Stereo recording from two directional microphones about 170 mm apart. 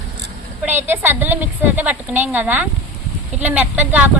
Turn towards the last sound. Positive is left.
turn(degrees=-10)  # may be behind; listen again after turning